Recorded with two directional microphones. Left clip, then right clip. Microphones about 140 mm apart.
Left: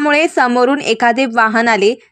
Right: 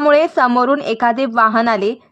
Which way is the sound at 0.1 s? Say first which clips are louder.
Even; 25° left (ahead or behind).